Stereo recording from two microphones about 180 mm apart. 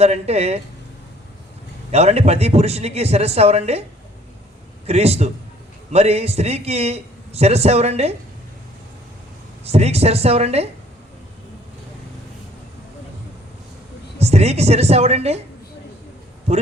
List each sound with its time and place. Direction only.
0.0 s a man's voice: 35° right (ahead or behind)
1.9 s a man's voice: 35° right (ahead or behind)
4.9 s a man's voice: 35° right (ahead or behind)
9.6 s a man's voice: 35° right (ahead or behind)
14.2 s a man's voice: 35° right (ahead or behind)